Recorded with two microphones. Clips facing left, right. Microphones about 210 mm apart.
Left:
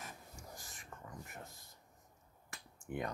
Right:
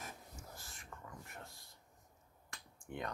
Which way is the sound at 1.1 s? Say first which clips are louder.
Left 2 dB; 20° left (ahead or behind).